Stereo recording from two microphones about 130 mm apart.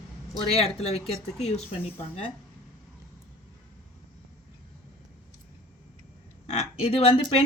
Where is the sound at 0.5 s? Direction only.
50° left (ahead or behind).